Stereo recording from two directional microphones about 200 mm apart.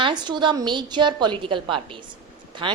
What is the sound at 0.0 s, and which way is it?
A woman's voice, 20° right (ahead or behind).